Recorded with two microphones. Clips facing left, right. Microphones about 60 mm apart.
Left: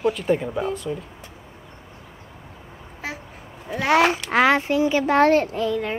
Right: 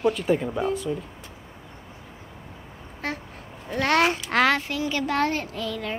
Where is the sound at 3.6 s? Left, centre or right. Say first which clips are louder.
Left 3 dB; centre.